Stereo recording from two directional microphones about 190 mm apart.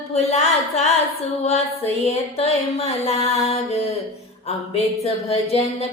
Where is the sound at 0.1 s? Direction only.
35° left (ahead or behind).